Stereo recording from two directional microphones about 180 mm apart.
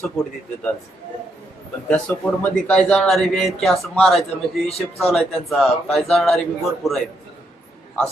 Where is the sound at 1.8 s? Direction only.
10° left (ahead or behind).